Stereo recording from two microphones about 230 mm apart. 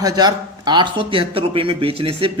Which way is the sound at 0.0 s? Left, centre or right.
Centre.